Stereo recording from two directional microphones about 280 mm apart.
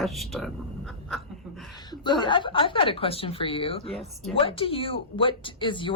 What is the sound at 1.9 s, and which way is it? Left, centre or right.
A woman's voice, centre.